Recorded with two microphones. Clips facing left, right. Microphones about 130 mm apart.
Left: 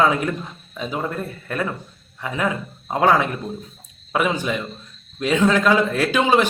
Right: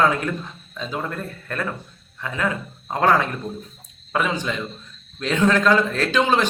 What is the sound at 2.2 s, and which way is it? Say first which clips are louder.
A man's voice: left 2 dB; 15° left (ahead or behind).